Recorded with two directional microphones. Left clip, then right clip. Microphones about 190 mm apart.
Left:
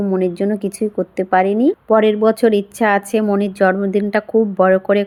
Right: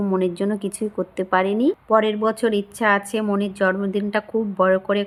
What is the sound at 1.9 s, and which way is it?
Speech, 20° left (ahead or behind).